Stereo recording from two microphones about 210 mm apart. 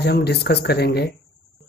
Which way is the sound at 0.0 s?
50° left (ahead or behind).